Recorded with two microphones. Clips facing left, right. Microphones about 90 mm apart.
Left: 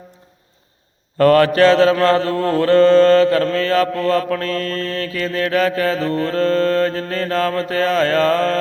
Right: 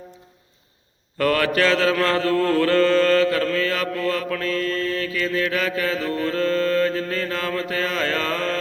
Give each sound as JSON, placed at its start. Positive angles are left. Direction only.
{"t": 1.2, "sound": "mantra", "side_deg": 40}